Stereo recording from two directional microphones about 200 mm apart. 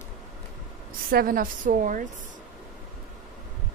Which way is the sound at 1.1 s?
45° right (ahead or behind).